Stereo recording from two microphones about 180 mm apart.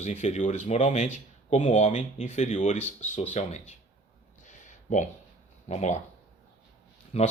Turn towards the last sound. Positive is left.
turn(degrees=35)  # may be behind; listen again after turning